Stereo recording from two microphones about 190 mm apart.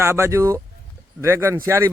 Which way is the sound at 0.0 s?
15° right (ahead or behind).